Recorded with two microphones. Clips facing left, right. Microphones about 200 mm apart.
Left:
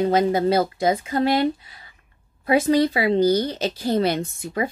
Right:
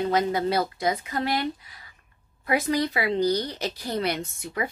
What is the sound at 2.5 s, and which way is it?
A woman's voice, 25° left (ahead or behind).